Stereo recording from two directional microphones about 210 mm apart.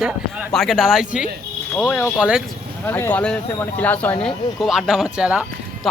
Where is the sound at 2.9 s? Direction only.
10° left (ahead or behind).